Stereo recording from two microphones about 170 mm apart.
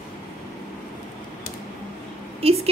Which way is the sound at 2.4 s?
35° right (ahead or behind).